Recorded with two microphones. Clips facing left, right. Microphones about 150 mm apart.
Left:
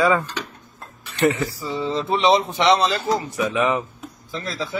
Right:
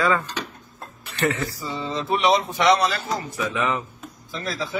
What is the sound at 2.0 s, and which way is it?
Speech, 25° left (ahead or behind).